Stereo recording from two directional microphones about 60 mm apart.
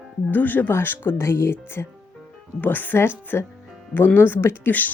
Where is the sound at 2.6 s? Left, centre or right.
Left.